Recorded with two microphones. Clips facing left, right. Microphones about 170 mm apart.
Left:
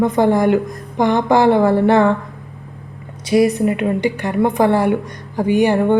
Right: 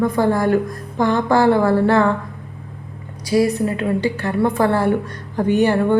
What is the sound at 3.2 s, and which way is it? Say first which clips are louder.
A woman's voice: left 3 dB; 20° left (ahead or behind).